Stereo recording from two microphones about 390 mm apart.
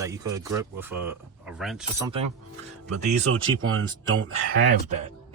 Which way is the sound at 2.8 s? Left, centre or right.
Right.